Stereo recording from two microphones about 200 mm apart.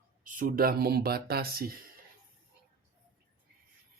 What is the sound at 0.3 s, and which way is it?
Speech, 45° right (ahead or behind).